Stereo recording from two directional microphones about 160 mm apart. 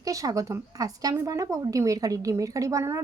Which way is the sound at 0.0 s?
20° right (ahead or behind).